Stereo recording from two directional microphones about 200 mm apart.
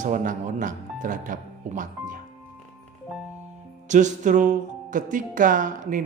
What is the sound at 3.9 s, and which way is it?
A man's voice, 40° right (ahead or behind).